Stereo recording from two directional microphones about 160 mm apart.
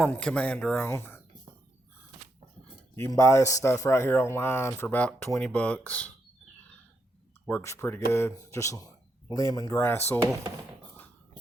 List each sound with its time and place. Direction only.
0.0 s speech: 5° left (ahead or behind)
2.9 s speech: 20° left (ahead or behind)
7.4 s speech: 15° left (ahead or behind)